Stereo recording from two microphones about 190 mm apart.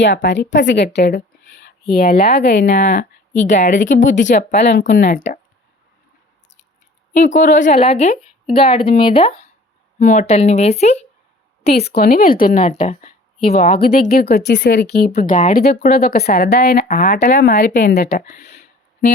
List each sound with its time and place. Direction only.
0.0 s a woman's voice: 70° left (ahead or behind)
2.8 s a woman's voice: 40° left (ahead or behind)
7.1 s a woman's voice: 40° left (ahead or behind)
10.0 s a woman's voice: 40° left (ahead or behind)
11.7 s a woman's voice: 55° left (ahead or behind); by 13.8 s 30° left (ahead or behind)
13.8 s speech: 50° left (ahead or behind)
17.5 s a woman's voice: 40° left (ahead or behind)